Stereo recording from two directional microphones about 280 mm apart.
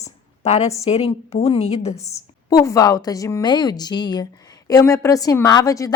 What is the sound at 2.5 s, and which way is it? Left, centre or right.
A woman's voice, centre.